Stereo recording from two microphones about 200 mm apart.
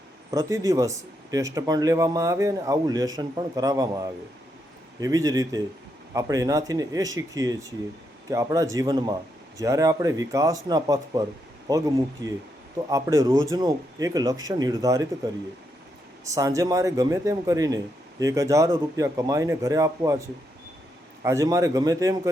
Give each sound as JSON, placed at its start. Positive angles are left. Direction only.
{"t": 0.3, "sound": "speech", "side_deg": -15}
{"t": 16.2, "sound": "speech", "side_deg": -15}